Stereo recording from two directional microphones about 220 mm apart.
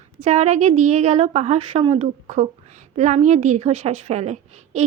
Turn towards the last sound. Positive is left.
turn(degrees=-30)  # may be behind; listen again after turning